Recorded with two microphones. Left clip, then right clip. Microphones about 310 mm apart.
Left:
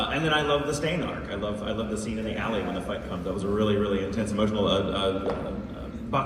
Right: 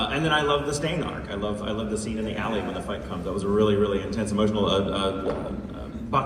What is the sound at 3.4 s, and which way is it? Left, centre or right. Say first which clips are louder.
A man's voice: right 4 dB; centre.